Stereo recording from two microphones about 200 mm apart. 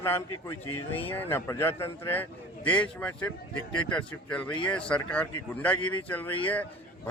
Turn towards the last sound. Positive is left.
turn(degrees=10)  # may be behind; listen again after turning